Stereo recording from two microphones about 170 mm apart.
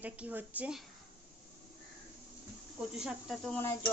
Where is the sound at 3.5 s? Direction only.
15° left (ahead or behind).